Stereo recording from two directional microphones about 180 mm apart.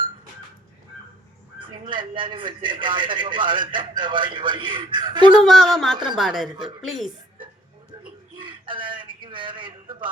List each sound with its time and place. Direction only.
2.0 s a man's voice: 25° right (ahead or behind)
5.4 s a woman's voice: centre (ahead or behind)
8.4 s a sound: 25° right (ahead or behind)